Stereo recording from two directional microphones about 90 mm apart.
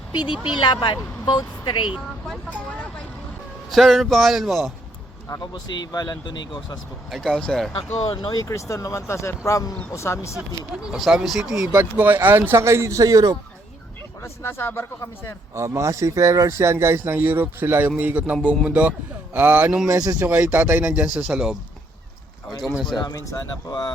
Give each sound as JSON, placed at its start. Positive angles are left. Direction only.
{"t": 0.1, "sound": "speech", "side_deg": 60}
{"t": 3.7, "sound": "a man's voice", "side_deg": 0}
{"t": 5.4, "sound": "speech", "side_deg": 50}
{"t": 7.1, "sound": "a man's voice", "side_deg": 5}
{"t": 7.8, "sound": "speech", "side_deg": 65}
{"t": 8.4, "sound": "speech", "side_deg": 35}
{"t": 10.8, "sound": "a man's voice", "side_deg": -5}
{"t": 11.7, "sound": "speech", "side_deg": -25}
{"t": 14.2, "sound": "speech", "side_deg": 30}
{"t": 15.5, "sound": "speech", "side_deg": -30}
{"t": 19.9, "sound": "speech", "side_deg": -40}
{"t": 20.1, "sound": "speech", "side_deg": -15}
{"t": 23.0, "sound": "speech", "side_deg": 50}